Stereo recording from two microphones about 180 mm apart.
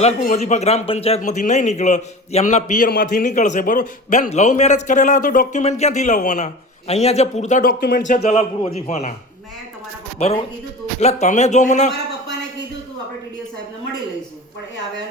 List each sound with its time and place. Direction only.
0.0 s speech: 40° left (ahead or behind)
10.2 s speech: 40° left (ahead or behind)